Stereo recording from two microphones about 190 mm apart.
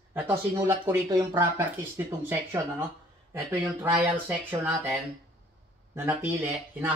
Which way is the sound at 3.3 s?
10° right (ahead or behind).